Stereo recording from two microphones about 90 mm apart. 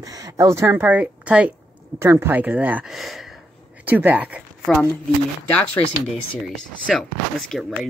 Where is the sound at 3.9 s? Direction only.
20° right (ahead or behind).